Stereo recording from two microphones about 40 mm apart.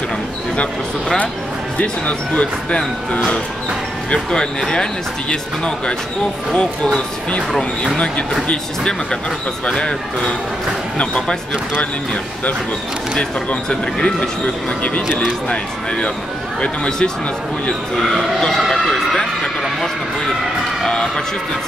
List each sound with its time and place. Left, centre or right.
1.8 s speech: left
6.5 s speech: left
7.5 s speech: centre
9.7 s speech: left
13.7 s speech: left
14.4 s speech: left
16.6 s speech: left
18.6 s speech: centre
19.1 s speech: centre